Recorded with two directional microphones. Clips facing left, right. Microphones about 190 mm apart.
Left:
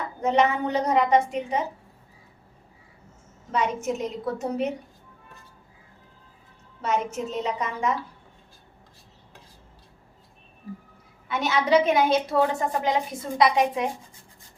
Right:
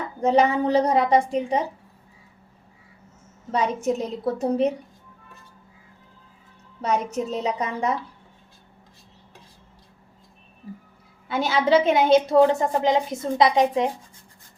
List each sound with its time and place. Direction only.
0.2 s a woman's voice: 35° right (ahead or behind)
3.5 s a woman's voice: 35° right (ahead or behind)
6.8 s a woman's voice: 35° right (ahead or behind)
11.3 s a woman's voice: 30° right (ahead or behind)